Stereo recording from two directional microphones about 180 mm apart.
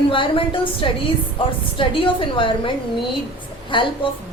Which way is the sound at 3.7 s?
25° left (ahead or behind).